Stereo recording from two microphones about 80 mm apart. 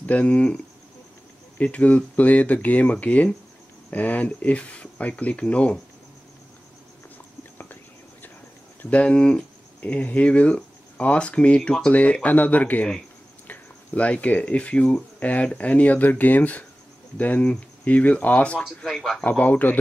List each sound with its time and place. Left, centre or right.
0.0 s speech: centre
1.6 s speech: centre
7.5 s whispering: left
8.9 s speech: centre
18.9 s speech: centre
19.2 s speech: centre